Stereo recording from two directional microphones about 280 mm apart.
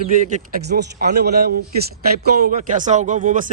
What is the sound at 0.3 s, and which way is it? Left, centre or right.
A man's voice, right.